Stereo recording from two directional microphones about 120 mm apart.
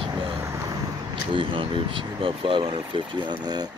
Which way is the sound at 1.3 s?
45° right (ahead or behind).